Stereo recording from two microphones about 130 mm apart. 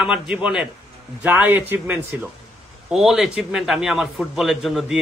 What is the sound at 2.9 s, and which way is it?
A man's voice, centre (ahead or behind).